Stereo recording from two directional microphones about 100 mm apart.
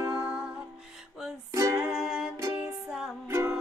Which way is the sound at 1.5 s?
35° right (ahead or behind).